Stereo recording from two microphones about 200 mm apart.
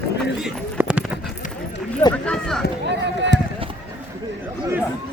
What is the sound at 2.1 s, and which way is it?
Speech, 5° left (ahead or behind).